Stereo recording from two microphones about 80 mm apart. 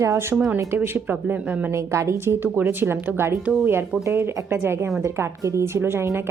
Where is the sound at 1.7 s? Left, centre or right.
Right.